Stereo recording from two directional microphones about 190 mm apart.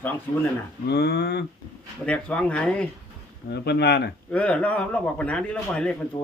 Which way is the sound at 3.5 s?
60° left (ahead or behind).